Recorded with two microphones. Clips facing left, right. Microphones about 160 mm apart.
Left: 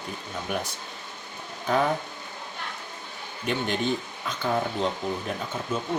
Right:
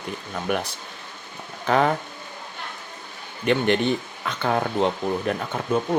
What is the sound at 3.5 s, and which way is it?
Speech, 65° right (ahead or behind).